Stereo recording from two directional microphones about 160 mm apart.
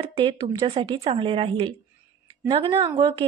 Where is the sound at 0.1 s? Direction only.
30° right (ahead or behind).